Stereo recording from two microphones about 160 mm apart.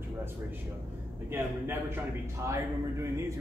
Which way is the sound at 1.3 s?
15° right (ahead or behind).